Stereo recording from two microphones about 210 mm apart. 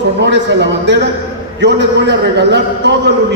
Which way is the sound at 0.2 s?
55° right (ahead or behind).